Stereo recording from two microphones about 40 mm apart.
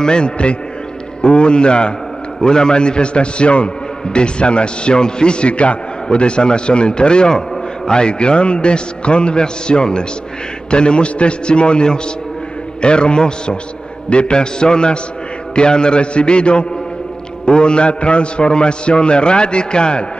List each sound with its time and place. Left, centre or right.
0.0 s a man's voice: left